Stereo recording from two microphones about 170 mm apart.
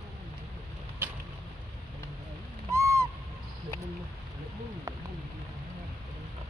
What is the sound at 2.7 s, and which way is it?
Owl, 15° right (ahead or behind).